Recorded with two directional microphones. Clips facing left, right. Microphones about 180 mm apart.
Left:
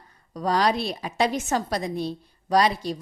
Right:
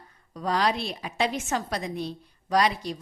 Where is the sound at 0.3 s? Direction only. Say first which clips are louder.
Left 3 dB; 40° left (ahead or behind).